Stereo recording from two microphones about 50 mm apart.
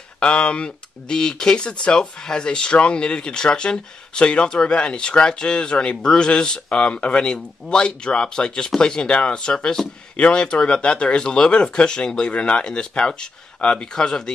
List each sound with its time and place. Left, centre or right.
0.2 s speech: left
7.3 s speech: centre
7.8 s speech: centre